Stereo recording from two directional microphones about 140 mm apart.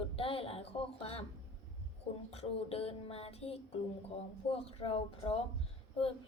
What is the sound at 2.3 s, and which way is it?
A woman's voice, 45° left (ahead or behind).